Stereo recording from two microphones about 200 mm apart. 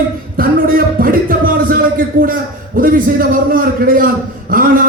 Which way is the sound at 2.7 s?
45° right (ahead or behind).